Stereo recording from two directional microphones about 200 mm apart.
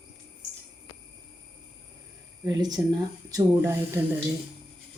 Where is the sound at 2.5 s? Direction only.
20° right (ahead or behind).